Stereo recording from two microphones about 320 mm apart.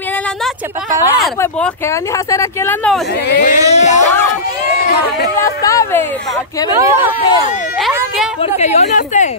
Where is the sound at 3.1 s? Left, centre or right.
Left.